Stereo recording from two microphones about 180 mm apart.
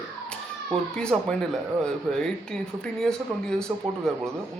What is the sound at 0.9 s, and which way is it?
Speech, 5° left (ahead or behind).